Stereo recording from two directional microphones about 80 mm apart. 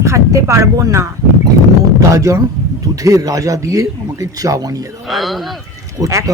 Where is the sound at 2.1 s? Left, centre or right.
Right.